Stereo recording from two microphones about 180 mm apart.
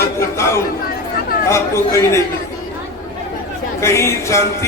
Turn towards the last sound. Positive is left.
turn(degrees=15)  # may be behind; listen again after turning